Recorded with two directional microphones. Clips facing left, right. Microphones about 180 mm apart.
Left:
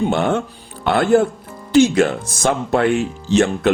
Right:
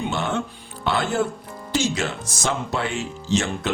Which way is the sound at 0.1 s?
55° left (ahead or behind).